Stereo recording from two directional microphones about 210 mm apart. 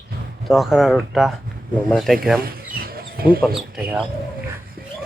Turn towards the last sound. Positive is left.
turn(degrees=0)  # may be behind; listen again after turning